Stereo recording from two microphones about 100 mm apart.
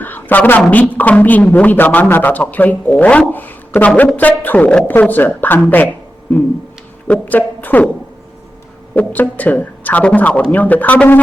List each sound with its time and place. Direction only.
0.0 s a woman's voice: 20° left (ahead or behind)
7.1 s a woman's voice: 15° left (ahead or behind)
9.0 s speech: 15° left (ahead or behind)